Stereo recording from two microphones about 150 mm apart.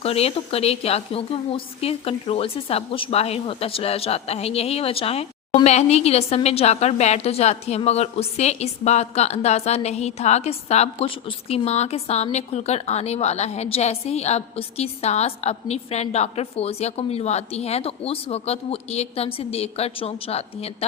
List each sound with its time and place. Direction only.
0.0 s a woman's voice: 40° left (ahead or behind)